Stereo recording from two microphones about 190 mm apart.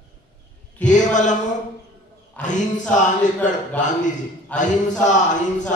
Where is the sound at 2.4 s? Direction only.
40° left (ahead or behind).